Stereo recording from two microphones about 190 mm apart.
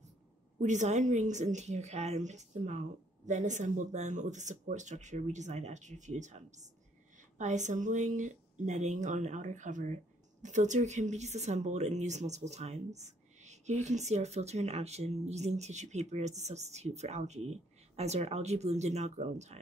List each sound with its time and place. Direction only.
0.6 s speech: 40° right (ahead or behind)